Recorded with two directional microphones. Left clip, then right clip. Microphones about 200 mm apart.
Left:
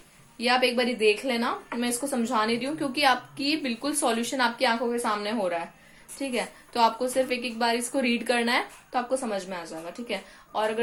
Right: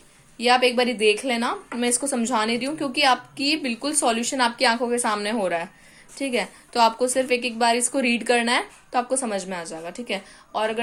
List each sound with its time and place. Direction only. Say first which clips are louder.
0.3 s a woman's voice: right 5 dB; 25° right (ahead or behind)